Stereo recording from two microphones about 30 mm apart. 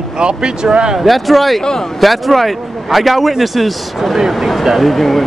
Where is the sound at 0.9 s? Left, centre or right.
Centre.